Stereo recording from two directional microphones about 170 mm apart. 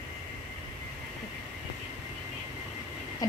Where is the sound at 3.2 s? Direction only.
20° left (ahead or behind).